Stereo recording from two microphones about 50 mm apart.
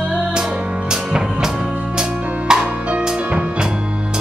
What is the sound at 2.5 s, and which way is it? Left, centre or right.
Music, centre.